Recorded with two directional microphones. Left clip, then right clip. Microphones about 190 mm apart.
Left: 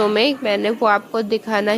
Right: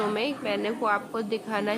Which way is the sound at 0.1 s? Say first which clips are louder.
Left 11 dB; 45° left (ahead or behind).